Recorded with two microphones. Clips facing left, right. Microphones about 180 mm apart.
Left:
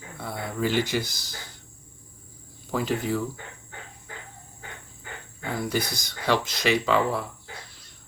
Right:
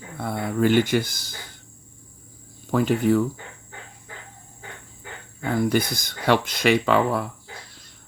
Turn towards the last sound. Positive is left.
turn(degrees=-55)  # may be behind; listen again after turning